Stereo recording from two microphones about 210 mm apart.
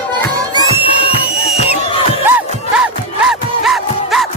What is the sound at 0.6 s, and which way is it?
Music, 25° left (ahead or behind).